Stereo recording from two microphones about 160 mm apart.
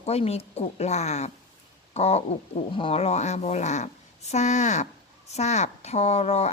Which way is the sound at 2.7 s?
35° left (ahead or behind).